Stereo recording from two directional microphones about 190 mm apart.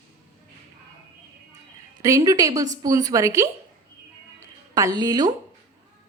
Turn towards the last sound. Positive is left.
turn(degrees=-20)  # may be behind; listen again after turning